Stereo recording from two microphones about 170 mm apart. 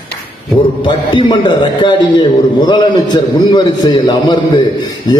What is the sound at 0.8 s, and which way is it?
A man's voice, 25° left (ahead or behind).